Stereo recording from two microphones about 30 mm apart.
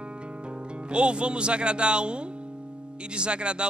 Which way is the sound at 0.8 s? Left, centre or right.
Right.